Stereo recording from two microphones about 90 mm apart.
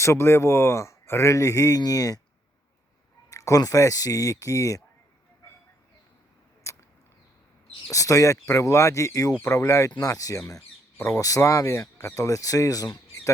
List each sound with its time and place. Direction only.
0.0 s speech: 30° left (ahead or behind)
3.2 s speech: 35° left (ahead or behind)
6.6 s a sound: 35° left (ahead or behind)
7.9 s speech: 40° left (ahead or behind)